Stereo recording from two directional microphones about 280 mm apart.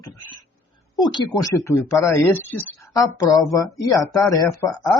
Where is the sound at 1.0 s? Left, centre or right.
Centre.